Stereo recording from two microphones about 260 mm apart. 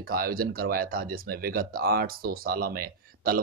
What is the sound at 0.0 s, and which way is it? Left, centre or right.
Speech, right.